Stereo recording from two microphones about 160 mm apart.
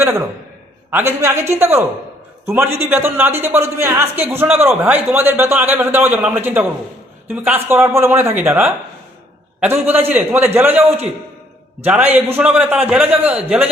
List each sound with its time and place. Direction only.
0.0 s a man's voice: 15° right (ahead or behind)